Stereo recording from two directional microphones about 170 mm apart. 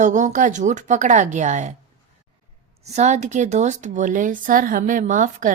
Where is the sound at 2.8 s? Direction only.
40° right (ahead or behind).